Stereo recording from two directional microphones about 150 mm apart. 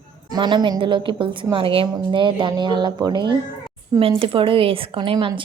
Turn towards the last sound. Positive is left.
turn(degrees=-35)  # may be behind; listen again after turning